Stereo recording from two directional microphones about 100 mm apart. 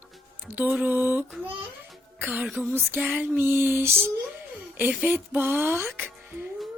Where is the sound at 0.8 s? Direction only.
20° right (ahead or behind).